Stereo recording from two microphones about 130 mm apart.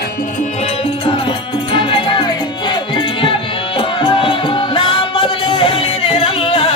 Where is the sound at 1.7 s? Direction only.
40° left (ahead or behind).